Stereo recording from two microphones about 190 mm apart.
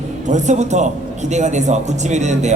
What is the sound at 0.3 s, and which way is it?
Speech, 40° right (ahead or behind).